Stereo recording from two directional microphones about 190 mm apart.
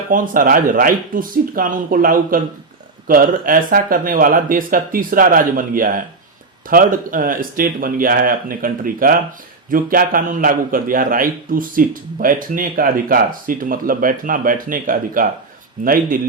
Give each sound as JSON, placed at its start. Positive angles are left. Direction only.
{"t": 0.1, "sound": "a man's voice", "side_deg": -50}